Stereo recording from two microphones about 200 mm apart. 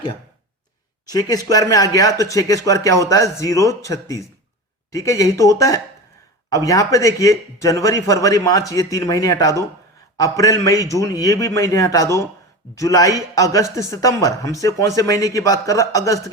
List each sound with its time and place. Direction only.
1.1 s a man's voice: 20° left (ahead or behind)